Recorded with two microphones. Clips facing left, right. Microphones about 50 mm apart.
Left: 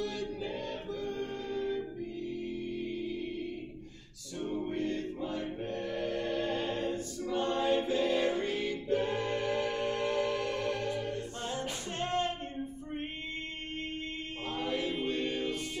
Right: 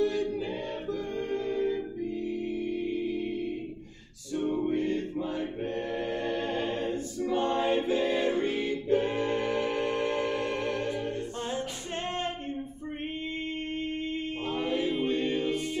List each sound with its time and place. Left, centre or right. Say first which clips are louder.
4.5 s music: right 5 dB; right
7.2 s choir: right 3 dB; right
14.6 s music: right 4 dB; centre